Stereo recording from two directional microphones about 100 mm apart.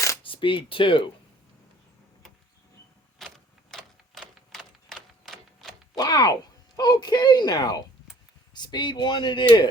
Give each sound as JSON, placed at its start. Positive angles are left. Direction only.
{"t": 0.2, "sound": "speech", "side_deg": 60}
{"t": 3.3, "sound": "a sound", "side_deg": 5}
{"t": 6.0, "sound": "speech", "side_deg": 45}